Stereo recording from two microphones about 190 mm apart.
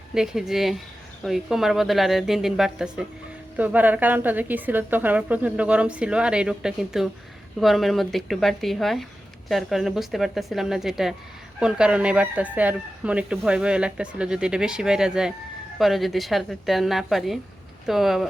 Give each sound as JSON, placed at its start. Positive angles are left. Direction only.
{"t": 0.1, "sound": "a woman's voice", "side_deg": -5}